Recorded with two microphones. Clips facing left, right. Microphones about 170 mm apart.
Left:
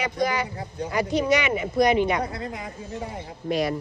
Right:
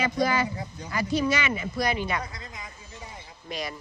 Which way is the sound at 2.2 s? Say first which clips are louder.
Left 10 dB; 60° left (ahead or behind).